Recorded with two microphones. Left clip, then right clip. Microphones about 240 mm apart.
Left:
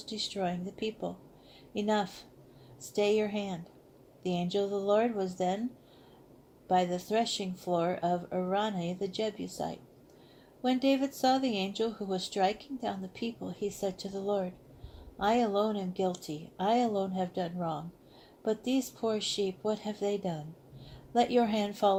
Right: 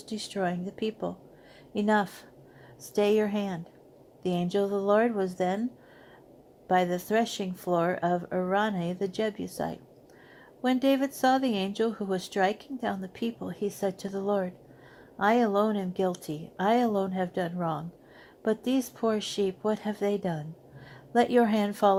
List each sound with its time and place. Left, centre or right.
0.0 s speech: right
6.7 s speech: right